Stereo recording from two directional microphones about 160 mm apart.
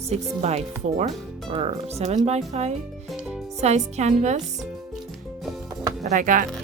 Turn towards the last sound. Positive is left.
turn(degrees=-55)  # may be behind; listen again after turning